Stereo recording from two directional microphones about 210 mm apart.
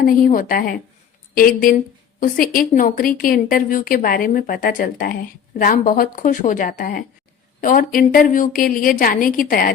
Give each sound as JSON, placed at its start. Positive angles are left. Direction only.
{"t": 0.0, "sound": "a woman's voice", "side_deg": 40}